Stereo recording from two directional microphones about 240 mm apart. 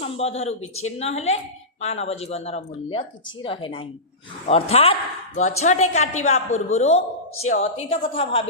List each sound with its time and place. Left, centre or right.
0.0 s a woman's voice: left